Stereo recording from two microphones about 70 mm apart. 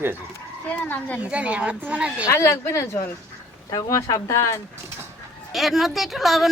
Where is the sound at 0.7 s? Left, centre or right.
Left.